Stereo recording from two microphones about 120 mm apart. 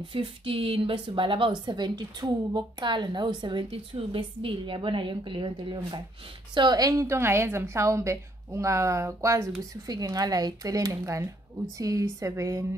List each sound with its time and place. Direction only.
0.1 s a woman's voice: 50° right (ahead or behind); by 12.6 s 25° right (ahead or behind)